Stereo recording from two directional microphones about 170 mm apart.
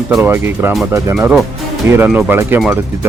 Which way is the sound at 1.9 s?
10° right (ahead or behind).